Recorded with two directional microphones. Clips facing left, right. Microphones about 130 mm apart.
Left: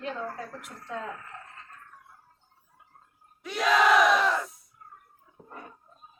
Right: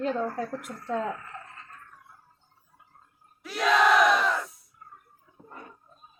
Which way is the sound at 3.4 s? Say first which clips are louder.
Right 1 dB; centre (ahead or behind).